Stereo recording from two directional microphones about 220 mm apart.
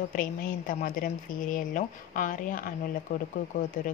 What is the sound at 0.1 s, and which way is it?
Speech, 40° left (ahead or behind).